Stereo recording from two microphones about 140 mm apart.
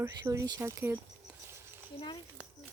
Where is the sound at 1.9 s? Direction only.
35° left (ahead or behind).